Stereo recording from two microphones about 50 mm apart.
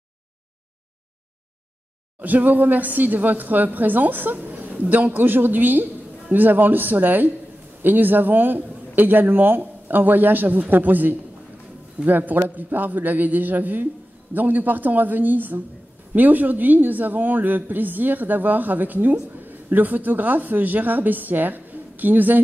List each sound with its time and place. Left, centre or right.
2.2 s a woman's voice: right